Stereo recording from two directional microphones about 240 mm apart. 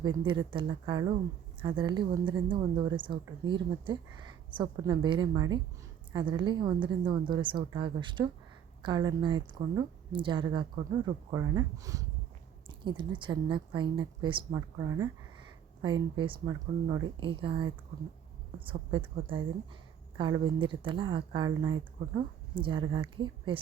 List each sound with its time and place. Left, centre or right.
0.3 s a woman's voice: centre
20.1 s a woman's voice: centre